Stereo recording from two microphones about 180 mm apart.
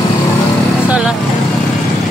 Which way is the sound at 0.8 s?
5° right (ahead or behind).